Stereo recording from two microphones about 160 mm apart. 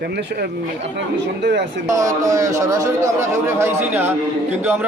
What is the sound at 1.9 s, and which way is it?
A man's voice, 20° right (ahead or behind).